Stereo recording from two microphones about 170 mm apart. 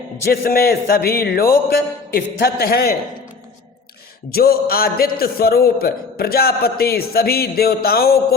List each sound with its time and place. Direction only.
0.3 s a man's voice: 65° left (ahead or behind)
4.3 s a man's voice: 65° left (ahead or behind)